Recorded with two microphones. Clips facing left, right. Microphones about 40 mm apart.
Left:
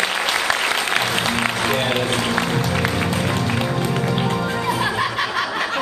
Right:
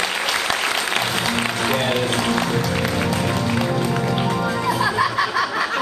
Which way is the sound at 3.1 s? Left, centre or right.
Centre.